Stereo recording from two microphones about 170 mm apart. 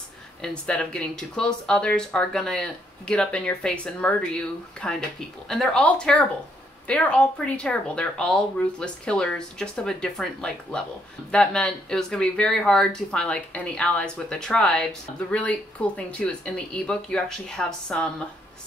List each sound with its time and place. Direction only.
0.4 s speech: 5° left (ahead or behind)